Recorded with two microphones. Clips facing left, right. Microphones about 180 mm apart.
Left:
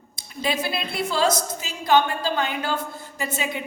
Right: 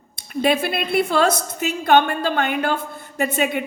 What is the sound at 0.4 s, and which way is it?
A woman's voice, 55° right (ahead or behind).